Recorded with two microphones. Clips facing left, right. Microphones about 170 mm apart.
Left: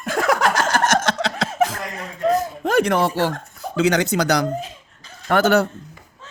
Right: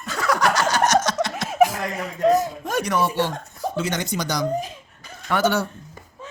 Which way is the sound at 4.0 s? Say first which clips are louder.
Left 6 dB; 70° left (ahead or behind).